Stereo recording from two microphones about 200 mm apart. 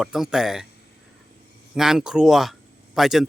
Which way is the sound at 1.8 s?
5° right (ahead or behind).